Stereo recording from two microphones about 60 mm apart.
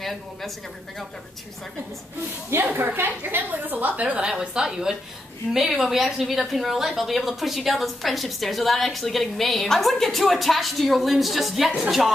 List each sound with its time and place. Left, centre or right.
0.0 s a woman's voice: centre
2.6 s a woman's voice: right; by 12.1 s centre